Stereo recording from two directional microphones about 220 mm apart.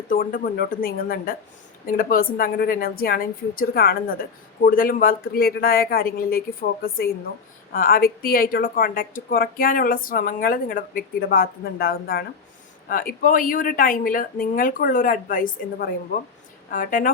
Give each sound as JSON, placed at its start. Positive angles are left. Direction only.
{"t": 0.1, "sound": "a woman's voice", "side_deg": 40}